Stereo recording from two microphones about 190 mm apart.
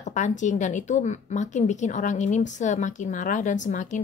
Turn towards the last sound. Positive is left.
turn(degrees=40)  # may be behind; listen again after turning